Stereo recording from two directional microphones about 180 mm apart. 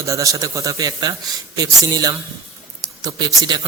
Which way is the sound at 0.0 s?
20° right (ahead or behind).